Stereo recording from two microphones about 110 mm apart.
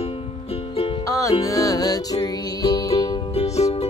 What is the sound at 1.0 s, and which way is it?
Music, 30° left (ahead or behind).